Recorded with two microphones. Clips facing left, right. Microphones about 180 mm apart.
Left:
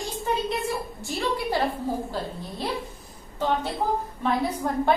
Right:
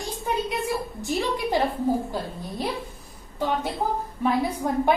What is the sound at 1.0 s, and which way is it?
Speech, 15° right (ahead or behind).